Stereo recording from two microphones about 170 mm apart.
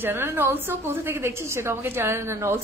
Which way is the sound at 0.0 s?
15° right (ahead or behind).